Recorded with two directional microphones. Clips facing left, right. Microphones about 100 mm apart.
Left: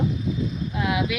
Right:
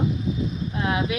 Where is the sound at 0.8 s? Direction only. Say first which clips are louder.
Even; 35° right (ahead or behind).